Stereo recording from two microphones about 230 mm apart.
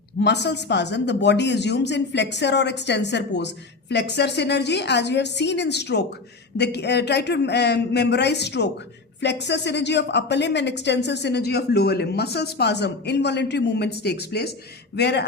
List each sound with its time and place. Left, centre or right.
0.2 s speech: left